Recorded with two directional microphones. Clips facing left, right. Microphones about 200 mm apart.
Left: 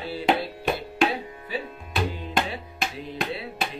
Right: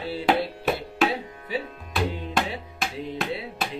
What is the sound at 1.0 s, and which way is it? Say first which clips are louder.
Tabla: even; 5° right (ahead or behind).